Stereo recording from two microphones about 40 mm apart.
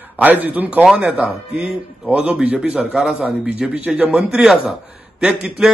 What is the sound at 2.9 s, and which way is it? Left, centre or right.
Speech, centre.